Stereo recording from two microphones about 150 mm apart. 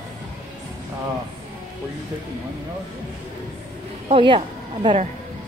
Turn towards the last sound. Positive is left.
turn(degrees=-35)  # may be behind; listen again after turning